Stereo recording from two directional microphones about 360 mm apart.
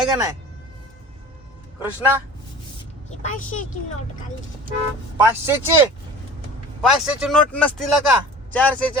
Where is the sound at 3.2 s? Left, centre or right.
Left.